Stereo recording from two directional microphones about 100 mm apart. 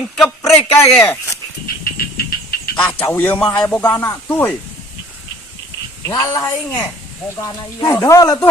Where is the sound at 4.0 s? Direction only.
20° left (ahead or behind).